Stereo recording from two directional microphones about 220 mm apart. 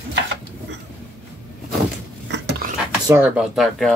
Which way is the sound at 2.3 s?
45° right (ahead or behind).